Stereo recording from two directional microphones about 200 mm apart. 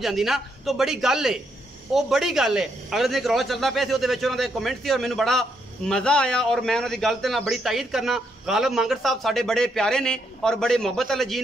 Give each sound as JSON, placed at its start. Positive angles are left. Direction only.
{"t": 0.0, "sound": "speech", "side_deg": 0}